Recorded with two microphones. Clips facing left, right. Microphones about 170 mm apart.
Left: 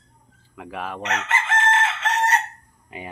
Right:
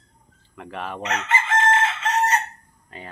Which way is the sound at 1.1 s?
75° left (ahead or behind).